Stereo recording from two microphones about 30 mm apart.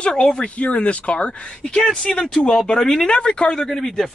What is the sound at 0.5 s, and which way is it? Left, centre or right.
Speech, left.